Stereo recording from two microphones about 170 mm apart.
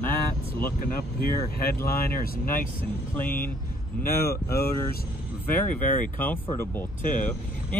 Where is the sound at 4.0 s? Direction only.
65° left (ahead or behind).